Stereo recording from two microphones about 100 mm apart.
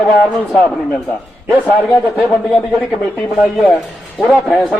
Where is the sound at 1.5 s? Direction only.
15° left (ahead or behind).